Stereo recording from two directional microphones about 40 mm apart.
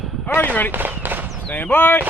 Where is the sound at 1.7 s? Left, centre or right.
Left.